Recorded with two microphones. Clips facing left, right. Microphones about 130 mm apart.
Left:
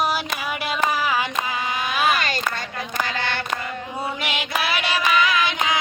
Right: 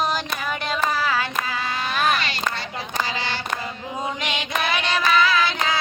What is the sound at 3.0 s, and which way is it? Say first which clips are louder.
Child singing: left 1 dB; 55° left (ahead or behind).